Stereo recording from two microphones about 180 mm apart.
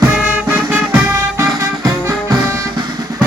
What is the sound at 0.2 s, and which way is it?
Music, 10° right (ahead or behind).